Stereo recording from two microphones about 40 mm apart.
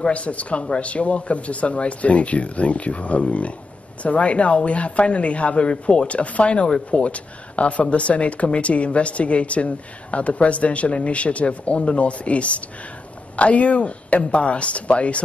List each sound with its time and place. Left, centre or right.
0.1 s speech: left